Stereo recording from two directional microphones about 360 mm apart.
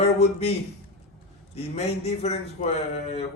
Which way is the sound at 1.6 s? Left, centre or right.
Centre.